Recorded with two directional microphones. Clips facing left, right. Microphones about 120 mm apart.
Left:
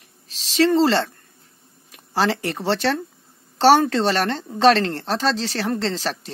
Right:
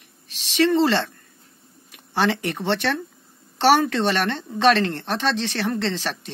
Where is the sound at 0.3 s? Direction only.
35° left (ahead or behind).